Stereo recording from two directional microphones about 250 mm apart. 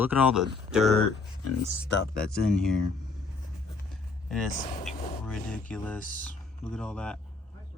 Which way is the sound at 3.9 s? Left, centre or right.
Centre.